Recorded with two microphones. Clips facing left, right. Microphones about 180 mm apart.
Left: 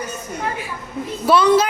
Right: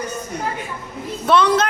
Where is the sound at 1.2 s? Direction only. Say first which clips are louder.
Left 2 dB; 5° left (ahead or behind).